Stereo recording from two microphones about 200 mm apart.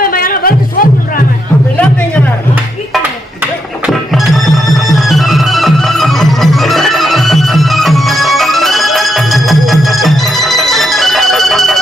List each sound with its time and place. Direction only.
0.0 s music: 45° left (ahead or behind)
3.8 s music: centre (ahead or behind)